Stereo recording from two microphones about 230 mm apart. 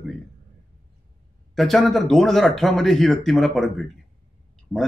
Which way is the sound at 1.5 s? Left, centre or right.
Centre.